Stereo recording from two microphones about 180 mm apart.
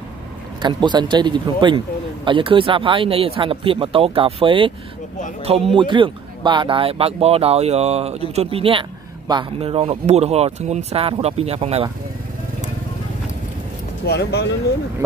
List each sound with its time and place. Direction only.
0.6 s speech: 25° right (ahead or behind)
5.8 s speech: 25° right (ahead or behind)
14.0 s speech: 65° left (ahead or behind)